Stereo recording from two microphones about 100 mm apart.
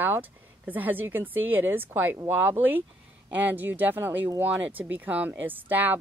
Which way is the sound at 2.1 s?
30° right (ahead or behind).